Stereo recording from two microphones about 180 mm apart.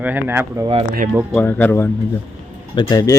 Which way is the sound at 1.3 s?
10° left (ahead or behind).